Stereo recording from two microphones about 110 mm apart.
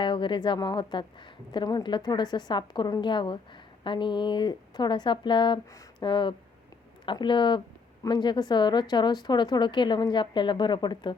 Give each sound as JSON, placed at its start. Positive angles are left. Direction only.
{"t": 0.0, "sound": "speech", "side_deg": 45}